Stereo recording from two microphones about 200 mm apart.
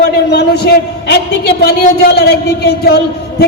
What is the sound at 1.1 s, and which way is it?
A woman's voice, 55° left (ahead or behind).